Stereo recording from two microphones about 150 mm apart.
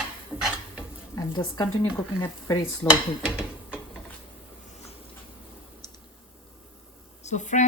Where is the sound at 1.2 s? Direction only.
30° left (ahead or behind).